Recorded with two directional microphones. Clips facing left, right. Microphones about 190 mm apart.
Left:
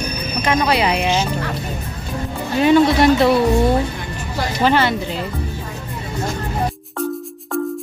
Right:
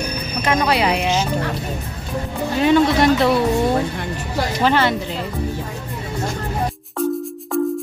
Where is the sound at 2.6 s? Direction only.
5° left (ahead or behind).